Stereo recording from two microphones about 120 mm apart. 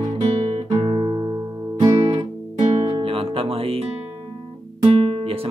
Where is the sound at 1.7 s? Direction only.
60° right (ahead or behind).